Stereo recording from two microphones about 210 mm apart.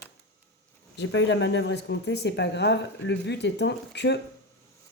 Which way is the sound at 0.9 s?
60° left (ahead or behind).